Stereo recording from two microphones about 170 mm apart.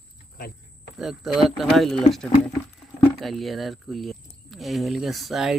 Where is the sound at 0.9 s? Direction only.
Centre (ahead or behind).